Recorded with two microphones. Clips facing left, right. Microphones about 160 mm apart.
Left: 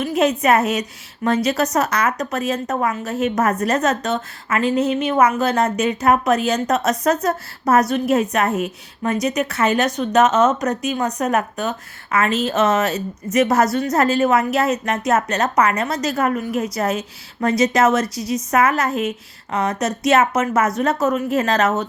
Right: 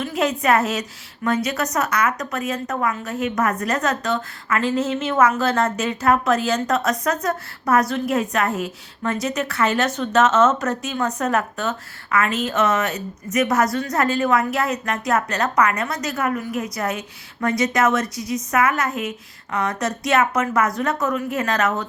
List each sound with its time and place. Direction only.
0.0 s a woman's voice: 20° left (ahead or behind)
1.5 s a woman's voice: 30° left (ahead or behind)